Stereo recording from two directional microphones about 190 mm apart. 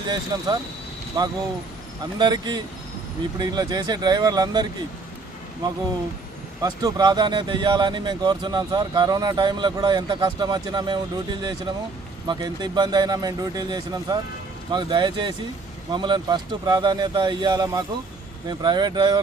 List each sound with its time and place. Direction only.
0.1 s speech: 25° right (ahead or behind)
6.6 s speech: 20° right (ahead or behind)